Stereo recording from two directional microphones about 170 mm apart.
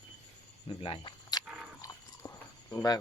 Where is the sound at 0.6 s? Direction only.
30° left (ahead or behind).